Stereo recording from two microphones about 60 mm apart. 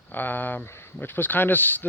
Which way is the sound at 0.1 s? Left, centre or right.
Left.